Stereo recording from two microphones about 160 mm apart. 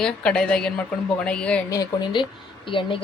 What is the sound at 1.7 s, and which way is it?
Speech, 25° left (ahead or behind).